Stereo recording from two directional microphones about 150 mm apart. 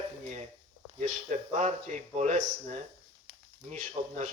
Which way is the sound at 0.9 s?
50° right (ahead or behind).